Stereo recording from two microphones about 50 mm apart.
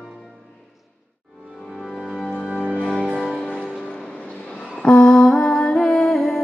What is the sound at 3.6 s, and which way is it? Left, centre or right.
Music, centre.